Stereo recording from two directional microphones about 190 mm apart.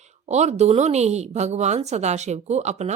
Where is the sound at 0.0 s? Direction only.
35° right (ahead or behind).